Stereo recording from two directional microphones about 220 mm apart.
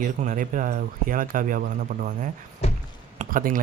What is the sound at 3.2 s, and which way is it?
Speech, 40° right (ahead or behind).